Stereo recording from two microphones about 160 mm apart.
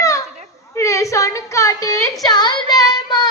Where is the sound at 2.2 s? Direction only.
25° left (ahead or behind).